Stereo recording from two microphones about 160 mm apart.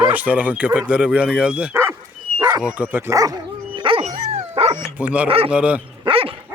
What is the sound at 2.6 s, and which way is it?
Dog, 10° right (ahead or behind).